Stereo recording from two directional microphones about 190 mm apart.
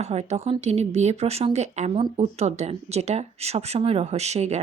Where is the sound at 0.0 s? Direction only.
35° right (ahead or behind).